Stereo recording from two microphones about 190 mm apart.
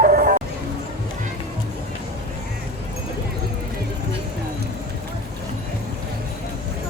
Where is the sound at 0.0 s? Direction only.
45° right (ahead or behind).